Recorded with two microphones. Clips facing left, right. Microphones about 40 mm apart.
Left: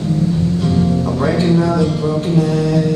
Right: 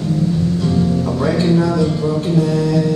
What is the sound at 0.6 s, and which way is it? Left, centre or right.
Music, left.